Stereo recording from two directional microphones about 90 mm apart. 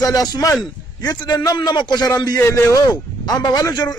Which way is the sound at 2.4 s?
40° left (ahead or behind).